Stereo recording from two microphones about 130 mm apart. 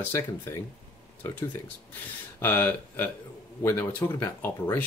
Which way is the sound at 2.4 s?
15° left (ahead or behind).